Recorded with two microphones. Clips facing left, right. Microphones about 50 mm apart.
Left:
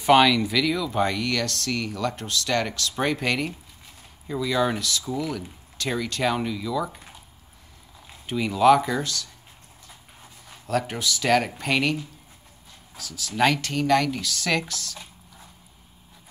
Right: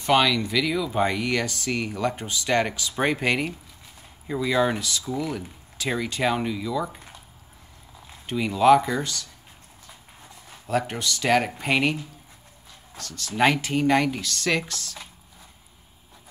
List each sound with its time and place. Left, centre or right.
0.0 s speech: centre
8.4 s speech: centre
10.7 s speech: centre
12.9 s speech: centre
13.3 s speech: centre
14.2 s speech: centre